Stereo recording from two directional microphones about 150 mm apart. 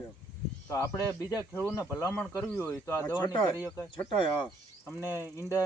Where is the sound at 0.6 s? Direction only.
20° left (ahead or behind).